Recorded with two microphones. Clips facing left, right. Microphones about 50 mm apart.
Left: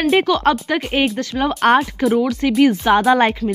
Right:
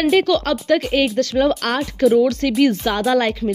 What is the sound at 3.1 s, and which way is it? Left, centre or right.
Speech, left.